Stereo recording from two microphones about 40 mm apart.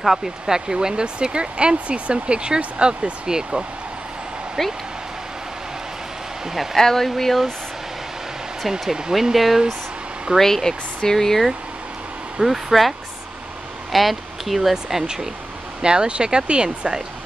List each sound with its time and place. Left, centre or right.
0.0 s speech: centre
4.6 s speech: centre
6.4 s speech: centre
6.8 s speech: centre
8.6 s speech: centre
10.3 s speech: centre
12.4 s speech: centre
13.9 s speech: centre
15.8 s speech: right